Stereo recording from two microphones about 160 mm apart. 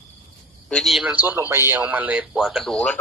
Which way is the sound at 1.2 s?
15° right (ahead or behind).